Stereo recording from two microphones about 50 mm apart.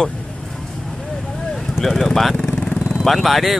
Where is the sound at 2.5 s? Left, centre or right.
Centre.